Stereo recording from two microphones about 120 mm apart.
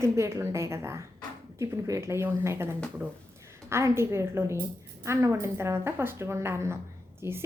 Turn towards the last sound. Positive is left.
turn(degrees=-20)  # may be behind; listen again after turning